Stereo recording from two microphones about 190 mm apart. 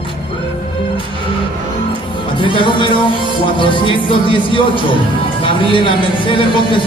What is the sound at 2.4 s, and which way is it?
Speech, 25° left (ahead or behind).